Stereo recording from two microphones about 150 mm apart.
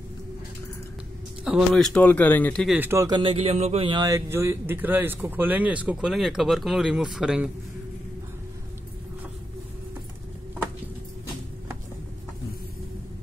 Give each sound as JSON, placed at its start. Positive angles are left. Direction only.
{"t": 1.4, "sound": "speech", "side_deg": 0}
{"t": 2.8, "sound": "speech", "side_deg": -15}
{"t": 3.1, "sound": "speech", "side_deg": -35}
{"t": 4.1, "sound": "speech", "side_deg": -15}